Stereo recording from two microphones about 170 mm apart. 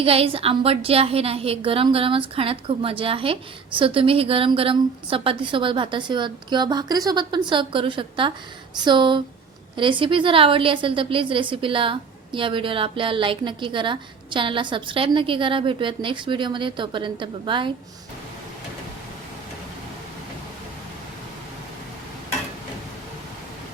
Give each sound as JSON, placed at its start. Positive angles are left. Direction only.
{"t": 0.0, "sound": "a woman's voice", "side_deg": -35}